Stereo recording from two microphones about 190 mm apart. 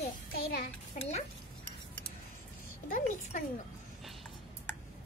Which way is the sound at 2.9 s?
40° left (ahead or behind).